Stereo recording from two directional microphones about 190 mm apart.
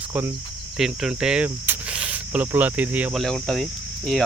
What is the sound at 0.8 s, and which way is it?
Speech, 5° right (ahead or behind).